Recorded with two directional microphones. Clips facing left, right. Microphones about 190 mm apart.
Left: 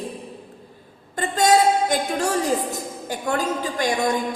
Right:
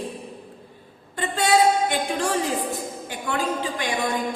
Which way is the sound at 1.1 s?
40° left (ahead or behind).